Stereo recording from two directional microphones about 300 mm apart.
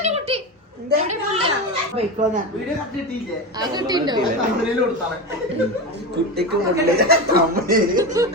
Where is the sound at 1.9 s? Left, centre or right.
Right.